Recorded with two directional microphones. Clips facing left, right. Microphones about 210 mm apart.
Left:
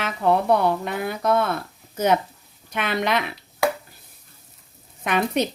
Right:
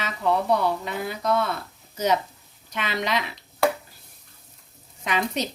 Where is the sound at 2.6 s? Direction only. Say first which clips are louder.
Left 4 dB; 55° left (ahead or behind).